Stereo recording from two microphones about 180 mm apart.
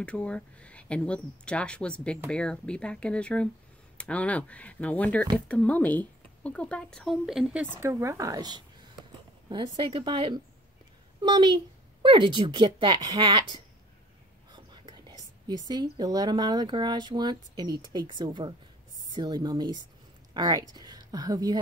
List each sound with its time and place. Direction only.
0.0 s a woman's voice: 5° left (ahead or behind); by 13.6 s 25° right (ahead or behind)
14.5 s whispering: 25° right (ahead or behind)
15.7 s speech: 25° right (ahead or behind)